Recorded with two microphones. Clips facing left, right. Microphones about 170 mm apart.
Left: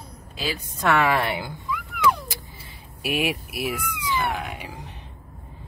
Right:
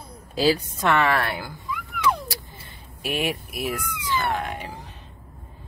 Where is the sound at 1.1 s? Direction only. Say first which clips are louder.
Left 1 dB; 20° left (ahead or behind).